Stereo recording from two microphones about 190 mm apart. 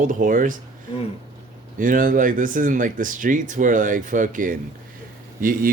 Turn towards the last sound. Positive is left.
turn(degrees=-45)  # may be behind; listen again after turning